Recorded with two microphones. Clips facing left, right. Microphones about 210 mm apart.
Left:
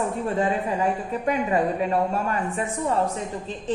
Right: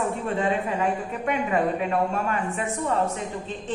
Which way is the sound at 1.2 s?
35° left (ahead or behind).